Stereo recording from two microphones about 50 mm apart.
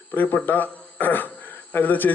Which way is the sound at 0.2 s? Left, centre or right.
Left.